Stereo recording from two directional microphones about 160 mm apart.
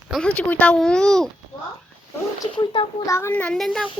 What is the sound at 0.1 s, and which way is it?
Speech, 5° left (ahead or behind).